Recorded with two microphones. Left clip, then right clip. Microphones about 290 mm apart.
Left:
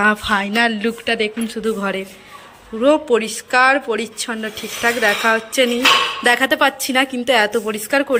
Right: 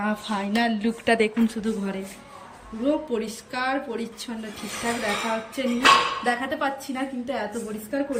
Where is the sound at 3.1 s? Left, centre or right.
Centre.